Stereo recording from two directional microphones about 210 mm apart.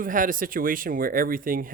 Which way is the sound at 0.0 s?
40° right (ahead or behind).